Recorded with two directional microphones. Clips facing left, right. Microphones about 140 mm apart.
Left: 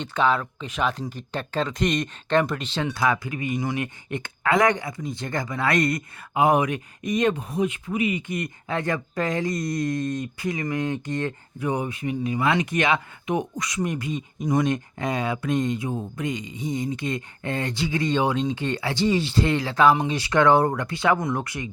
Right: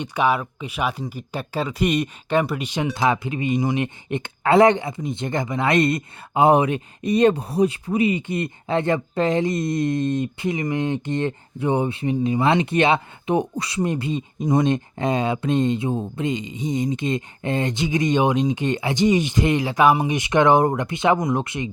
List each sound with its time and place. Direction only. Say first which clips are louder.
0.0 s speech: right 2 dB; 10° right (ahead or behind)